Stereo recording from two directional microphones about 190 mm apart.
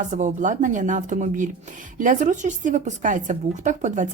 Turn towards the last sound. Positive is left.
turn(degrees=-40)  # may be behind; listen again after turning